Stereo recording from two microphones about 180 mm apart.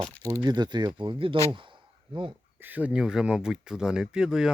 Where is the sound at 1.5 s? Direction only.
25° right (ahead or behind).